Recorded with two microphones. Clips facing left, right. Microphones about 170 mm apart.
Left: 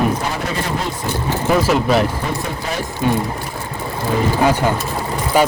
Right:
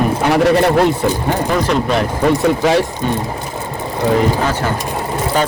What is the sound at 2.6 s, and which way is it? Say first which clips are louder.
Speech: right 12 dB; 90° right.